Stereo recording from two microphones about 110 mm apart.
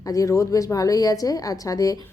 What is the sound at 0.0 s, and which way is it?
Speech, 30° left (ahead or behind).